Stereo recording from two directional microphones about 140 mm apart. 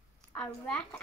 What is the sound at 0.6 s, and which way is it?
Speech, 5° left (ahead or behind).